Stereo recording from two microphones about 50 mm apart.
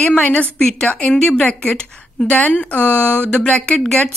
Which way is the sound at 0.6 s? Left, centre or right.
Centre.